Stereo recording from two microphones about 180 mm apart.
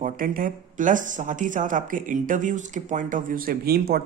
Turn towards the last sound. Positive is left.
turn(degrees=-55)  # may be behind; listen again after turning